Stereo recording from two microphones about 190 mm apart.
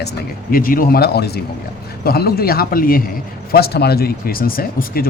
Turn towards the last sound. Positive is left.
turn(degrees=50)  # may be behind; listen again after turning